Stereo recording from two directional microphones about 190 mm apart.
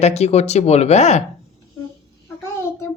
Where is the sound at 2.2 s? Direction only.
15° left (ahead or behind).